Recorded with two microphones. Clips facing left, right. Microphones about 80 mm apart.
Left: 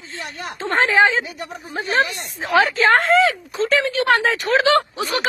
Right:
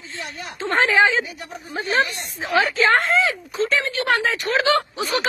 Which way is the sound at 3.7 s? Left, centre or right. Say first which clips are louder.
Left 5 dB; left.